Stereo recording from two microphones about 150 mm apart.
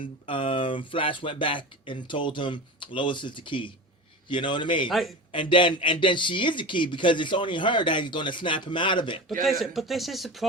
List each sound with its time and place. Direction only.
0.3 s speech: 35° left (ahead or behind)
4.9 s a man's voice: centre (ahead or behind)
5.3 s speech: 35° left (ahead or behind)
9.4 s a man's voice: centre (ahead or behind)